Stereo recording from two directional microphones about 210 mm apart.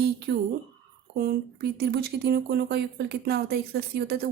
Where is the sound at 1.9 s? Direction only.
50° right (ahead or behind).